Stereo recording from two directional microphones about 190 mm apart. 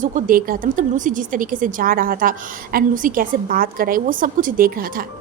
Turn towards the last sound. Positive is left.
turn(degrees=-50)  # may be behind; listen again after turning